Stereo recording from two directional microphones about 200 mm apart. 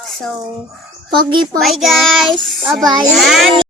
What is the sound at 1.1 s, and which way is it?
Speech, 25° right (ahead or behind).